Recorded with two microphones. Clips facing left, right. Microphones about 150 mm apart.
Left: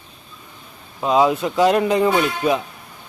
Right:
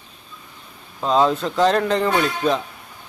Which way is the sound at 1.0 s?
10° left (ahead or behind).